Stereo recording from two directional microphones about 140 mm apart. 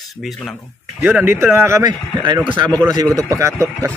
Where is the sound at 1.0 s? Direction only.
15° right (ahead or behind).